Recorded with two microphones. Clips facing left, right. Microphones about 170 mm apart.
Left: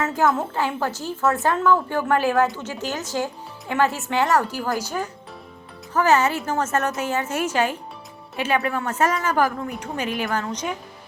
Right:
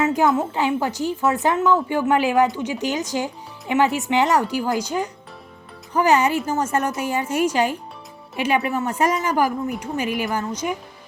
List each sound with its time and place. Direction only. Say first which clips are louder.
0.0 s a woman's voice: right 3 dB; 20° right (ahead or behind)